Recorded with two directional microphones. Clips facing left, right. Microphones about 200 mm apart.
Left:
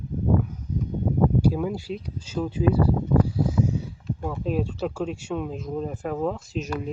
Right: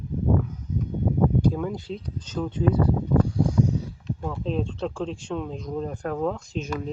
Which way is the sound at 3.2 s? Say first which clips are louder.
Right 1 dB; 5° left (ahead or behind).